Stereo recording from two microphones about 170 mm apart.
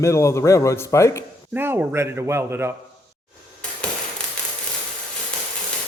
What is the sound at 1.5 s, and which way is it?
Speech, 10° right (ahead or behind).